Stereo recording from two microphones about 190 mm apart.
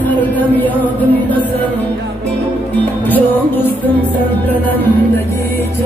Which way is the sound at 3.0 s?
10° left (ahead or behind).